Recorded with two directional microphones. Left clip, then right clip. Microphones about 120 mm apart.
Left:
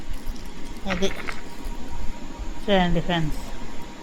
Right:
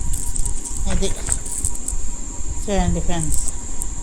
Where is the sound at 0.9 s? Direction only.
30° right (ahead or behind).